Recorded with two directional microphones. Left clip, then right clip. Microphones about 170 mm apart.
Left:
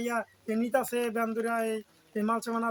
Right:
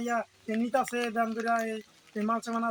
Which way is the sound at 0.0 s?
15° left (ahead or behind).